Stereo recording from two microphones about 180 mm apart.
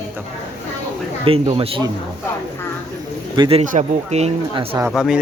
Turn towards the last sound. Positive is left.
turn(degrees=-5)  # may be behind; listen again after turning